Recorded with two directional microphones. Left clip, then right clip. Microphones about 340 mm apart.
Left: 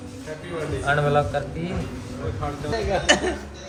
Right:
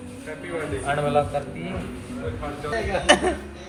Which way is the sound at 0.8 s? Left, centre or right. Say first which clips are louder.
Left 2 dB; left.